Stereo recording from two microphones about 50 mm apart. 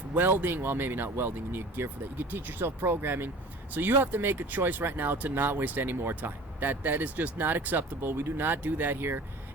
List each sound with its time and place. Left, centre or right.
0.1 s speech: right